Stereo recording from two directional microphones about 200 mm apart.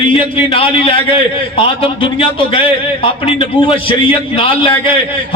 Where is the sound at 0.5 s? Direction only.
30° left (ahead or behind).